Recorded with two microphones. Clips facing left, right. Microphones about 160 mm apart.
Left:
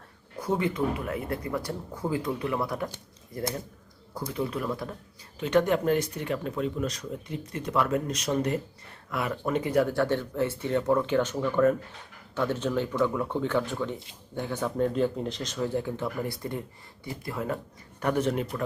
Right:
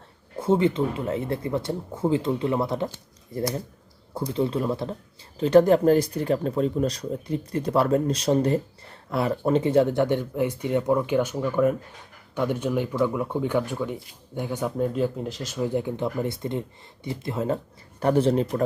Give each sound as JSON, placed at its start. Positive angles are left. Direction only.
{"t": 0.3, "sound": "speech", "side_deg": -25}
{"t": 4.3, "sound": "speech", "side_deg": -25}